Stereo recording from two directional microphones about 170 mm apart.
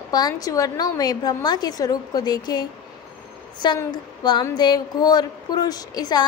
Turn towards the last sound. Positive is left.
turn(degrees=20)  # may be behind; listen again after turning